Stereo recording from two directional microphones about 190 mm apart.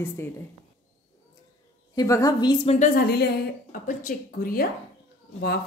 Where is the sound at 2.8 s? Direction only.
55° left (ahead or behind).